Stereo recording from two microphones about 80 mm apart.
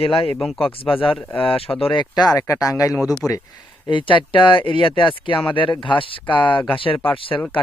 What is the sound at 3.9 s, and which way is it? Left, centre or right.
Speech, left.